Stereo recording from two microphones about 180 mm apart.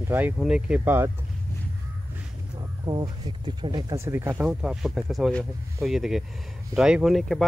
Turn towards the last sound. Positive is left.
turn(degrees=0)  # may be behind; listen again after turning